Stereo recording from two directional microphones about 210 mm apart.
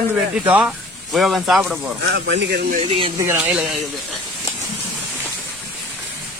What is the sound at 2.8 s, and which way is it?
Speech, 30° right (ahead or behind).